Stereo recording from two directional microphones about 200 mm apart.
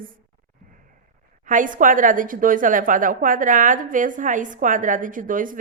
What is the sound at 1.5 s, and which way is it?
A woman's voice, 40° right (ahead or behind).